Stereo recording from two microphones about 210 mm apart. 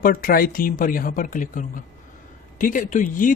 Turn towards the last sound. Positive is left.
turn(degrees=40)  # may be behind; listen again after turning